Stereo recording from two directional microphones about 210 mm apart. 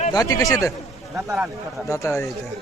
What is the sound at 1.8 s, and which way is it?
Speech, 15° left (ahead or behind).